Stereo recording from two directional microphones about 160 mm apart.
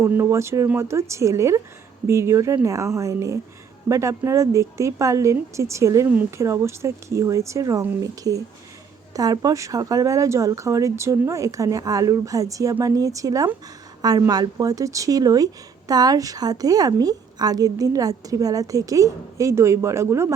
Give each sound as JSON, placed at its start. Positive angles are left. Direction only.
{"t": 0.0, "sound": "a woman's voice", "side_deg": -15}